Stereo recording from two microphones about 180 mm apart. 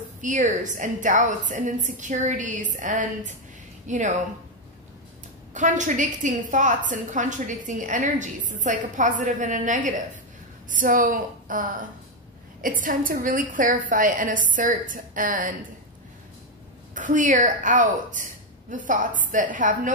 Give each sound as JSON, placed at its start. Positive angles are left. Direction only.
{"t": 0.2, "sound": "a woman's voice", "side_deg": -45}
{"t": 5.5, "sound": "a woman's voice", "side_deg": -45}
{"t": 12.8, "sound": "a woman's voice", "side_deg": -50}
{"t": 16.9, "sound": "a woman's voice", "side_deg": -45}